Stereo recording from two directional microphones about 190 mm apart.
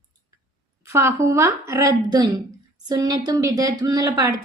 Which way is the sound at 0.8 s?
15° right (ahead or behind).